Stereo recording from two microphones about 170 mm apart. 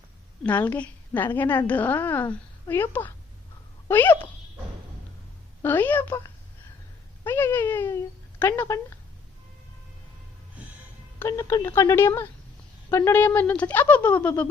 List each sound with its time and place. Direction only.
0.4 s a woman's voice: 10° left (ahead or behind)
5.6 s a woman's voice: 10° left (ahead or behind)
7.3 s a woman's voice: 10° left (ahead or behind)
11.2 s a woman's voice: 15° left (ahead or behind)